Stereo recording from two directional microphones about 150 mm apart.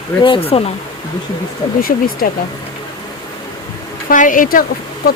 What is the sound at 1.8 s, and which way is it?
Speech, 75° left (ahead or behind).